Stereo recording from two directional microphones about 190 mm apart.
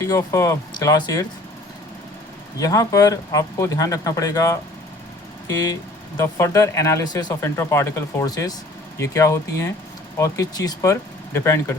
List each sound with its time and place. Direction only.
0.1 s speech: 15° left (ahead or behind)
2.6 s speech: 20° left (ahead or behind)